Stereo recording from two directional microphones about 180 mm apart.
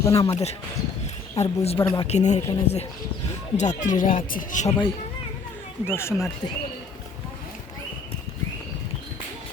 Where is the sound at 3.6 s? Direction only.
45° left (ahead or behind).